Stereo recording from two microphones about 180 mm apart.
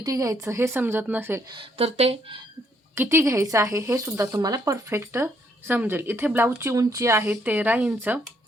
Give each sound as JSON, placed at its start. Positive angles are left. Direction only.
{"t": 0.0, "sound": "a woman's voice", "side_deg": -20}
{"t": 1.5, "sound": "speech", "side_deg": -30}
{"t": 2.9, "sound": "a woman's voice", "side_deg": -15}